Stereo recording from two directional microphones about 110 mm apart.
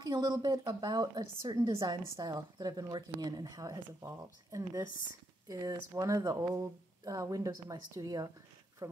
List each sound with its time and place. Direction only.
0.0 s a woman's voice: 40° right (ahead or behind)